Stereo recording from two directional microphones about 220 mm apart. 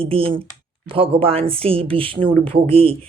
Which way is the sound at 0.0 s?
25° right (ahead or behind).